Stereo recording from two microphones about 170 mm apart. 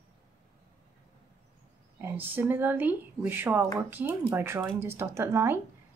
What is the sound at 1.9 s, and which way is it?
Speech, 10° right (ahead or behind).